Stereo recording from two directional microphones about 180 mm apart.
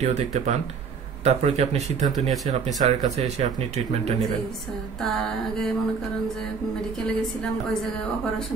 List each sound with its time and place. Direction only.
0.0 s speech: 40° right (ahead or behind)
2.1 s mantra: centre (ahead or behind)
2.5 s speech: 40° right (ahead or behind)
5.1 s mantra: centre (ahead or behind)